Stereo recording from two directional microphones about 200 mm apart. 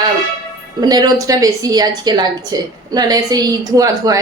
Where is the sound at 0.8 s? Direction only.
20° right (ahead or behind).